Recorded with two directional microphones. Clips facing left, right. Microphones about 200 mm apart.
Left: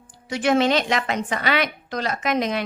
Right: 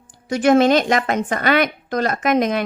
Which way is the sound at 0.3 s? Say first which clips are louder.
Right 5 dB; 45° right (ahead or behind).